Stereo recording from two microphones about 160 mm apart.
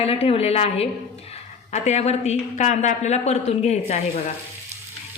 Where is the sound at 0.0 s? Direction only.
35° left (ahead or behind).